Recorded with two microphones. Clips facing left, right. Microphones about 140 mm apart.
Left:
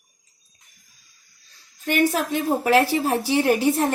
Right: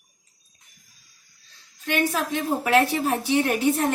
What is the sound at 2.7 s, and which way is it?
Speech, 30° left (ahead or behind).